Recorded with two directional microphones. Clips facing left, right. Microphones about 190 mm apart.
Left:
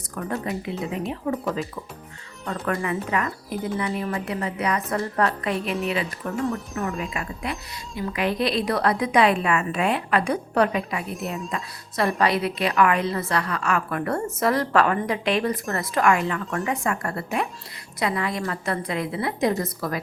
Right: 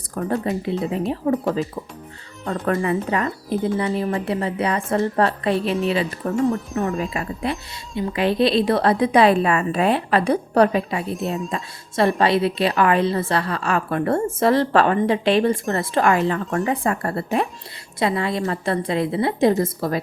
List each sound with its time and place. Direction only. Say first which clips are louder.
0.1 s a woman's voice: right 5 dB; 35° right (ahead or behind)